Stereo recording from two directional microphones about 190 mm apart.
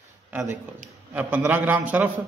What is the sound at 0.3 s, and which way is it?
A man's voice, 10° right (ahead or behind).